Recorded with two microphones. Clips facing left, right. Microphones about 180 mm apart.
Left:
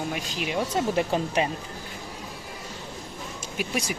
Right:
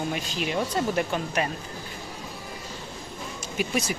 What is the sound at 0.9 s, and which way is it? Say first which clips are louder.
Speech: left 2 dB; 20° left (ahead or behind).